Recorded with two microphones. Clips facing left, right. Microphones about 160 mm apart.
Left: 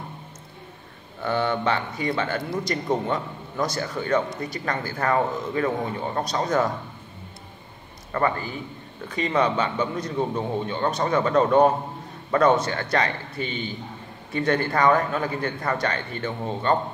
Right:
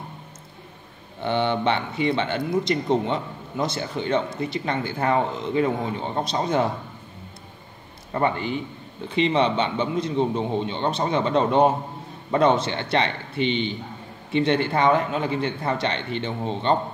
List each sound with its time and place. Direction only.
1.2 s a man's voice: 25° right (ahead or behind)
8.1 s a man's voice: 25° right (ahead or behind)
14.3 s a man's voice: 25° right (ahead or behind)